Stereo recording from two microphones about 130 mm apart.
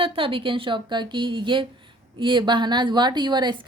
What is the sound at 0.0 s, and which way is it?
A woman's voice, 45° right (ahead or behind).